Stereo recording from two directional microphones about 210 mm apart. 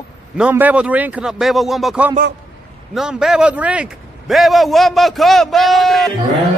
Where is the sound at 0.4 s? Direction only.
10° right (ahead or behind).